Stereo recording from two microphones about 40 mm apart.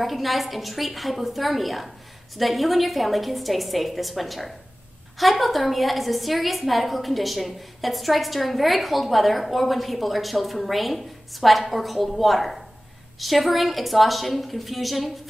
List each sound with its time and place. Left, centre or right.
0.0 s a woman's voice: centre